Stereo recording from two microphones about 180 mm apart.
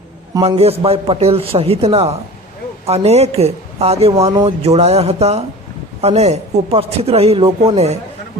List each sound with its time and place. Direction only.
0.3 s a woman's voice: 30° right (ahead or behind)